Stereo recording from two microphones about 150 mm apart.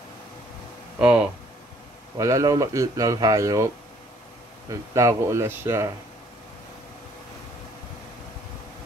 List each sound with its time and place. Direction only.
0.9 s speech: 10° right (ahead or behind)
2.1 s speech: 25° right (ahead or behind)
4.6 s speech: 20° right (ahead or behind)